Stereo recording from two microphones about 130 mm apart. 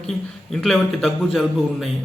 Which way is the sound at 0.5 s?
Centre (ahead or behind).